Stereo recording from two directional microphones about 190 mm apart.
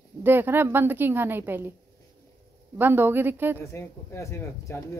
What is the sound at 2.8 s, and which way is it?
Speech, 10° right (ahead or behind).